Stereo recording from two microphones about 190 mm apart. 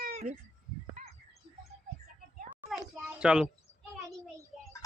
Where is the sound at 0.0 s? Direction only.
50° right (ahead or behind).